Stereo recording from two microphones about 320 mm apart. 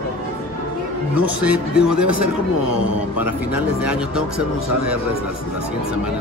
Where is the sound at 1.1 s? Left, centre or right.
Centre.